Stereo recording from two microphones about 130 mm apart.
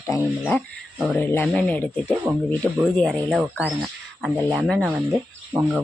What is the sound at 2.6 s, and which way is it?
Speech, centre (ahead or behind).